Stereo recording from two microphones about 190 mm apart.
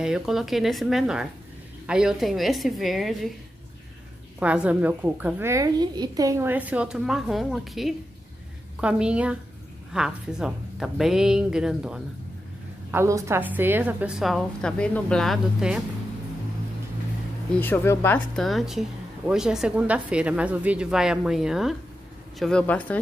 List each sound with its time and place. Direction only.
0.0 s a woman's voice: centre (ahead or behind)
4.4 s a woman's voice: 5° right (ahead or behind)
12.9 s a woman's voice: 15° right (ahead or behind)
17.6 s a woman's voice: 10° left (ahead or behind)